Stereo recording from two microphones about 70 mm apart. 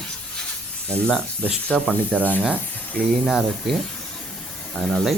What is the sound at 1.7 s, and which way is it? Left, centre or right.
Speech, centre.